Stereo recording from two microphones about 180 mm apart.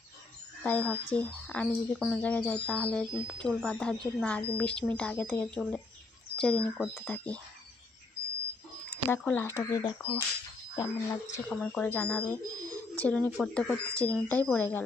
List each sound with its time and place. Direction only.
0.6 s speech: 10° left (ahead or behind)
9.0 s speech: 10° left (ahead or behind)
11.4 s speech: 5° left (ahead or behind)